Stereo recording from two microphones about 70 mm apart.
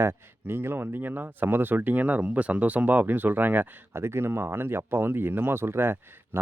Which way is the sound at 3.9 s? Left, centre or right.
Right.